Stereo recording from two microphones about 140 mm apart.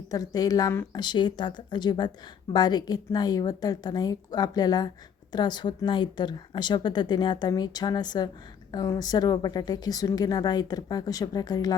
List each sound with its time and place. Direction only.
0.1 s a woman's voice: 25° left (ahead or behind)
0.9 s a woman's voice: 30° left (ahead or behind)